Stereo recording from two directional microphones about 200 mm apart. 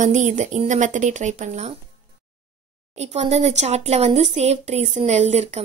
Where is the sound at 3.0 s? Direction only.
35° right (ahead or behind).